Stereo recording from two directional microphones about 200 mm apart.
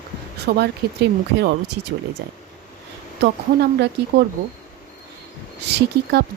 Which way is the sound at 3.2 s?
55° right (ahead or behind).